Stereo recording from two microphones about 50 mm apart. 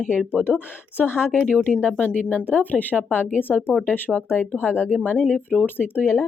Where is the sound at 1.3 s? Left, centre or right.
Left.